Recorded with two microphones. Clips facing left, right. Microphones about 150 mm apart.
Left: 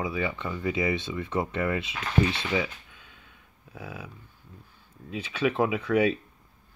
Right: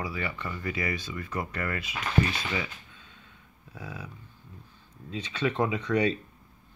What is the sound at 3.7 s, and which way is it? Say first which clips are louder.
Speech: left 1 dB; 10° left (ahead or behind).